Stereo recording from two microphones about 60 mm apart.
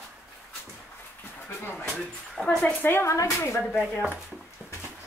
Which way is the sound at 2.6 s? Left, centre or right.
Left.